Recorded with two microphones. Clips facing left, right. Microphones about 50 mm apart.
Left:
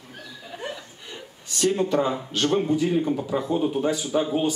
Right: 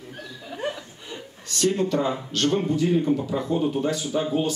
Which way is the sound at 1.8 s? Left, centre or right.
Centre.